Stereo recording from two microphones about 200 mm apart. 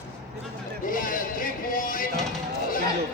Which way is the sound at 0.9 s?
45° left (ahead or behind).